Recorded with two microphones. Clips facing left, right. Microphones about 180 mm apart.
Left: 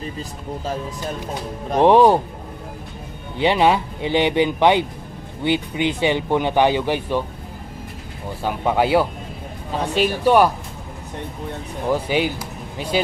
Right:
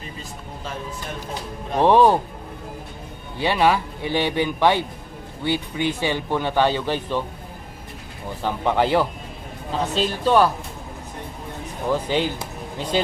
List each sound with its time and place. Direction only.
0.0 s speech: 35° left (ahead or behind)
1.8 s speech: 15° left (ahead or behind)
3.3 s speech: 20° left (ahead or behind)
8.4 s speech: 10° left (ahead or behind)
11.9 s speech: 10° left (ahead or behind)